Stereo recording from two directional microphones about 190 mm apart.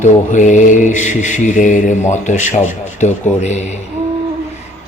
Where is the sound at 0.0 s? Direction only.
40° left (ahead or behind).